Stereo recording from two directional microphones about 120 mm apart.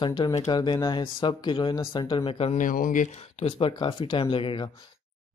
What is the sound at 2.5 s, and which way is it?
Speech, 90° left.